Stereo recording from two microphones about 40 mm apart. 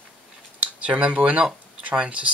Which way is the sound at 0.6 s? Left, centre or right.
Right.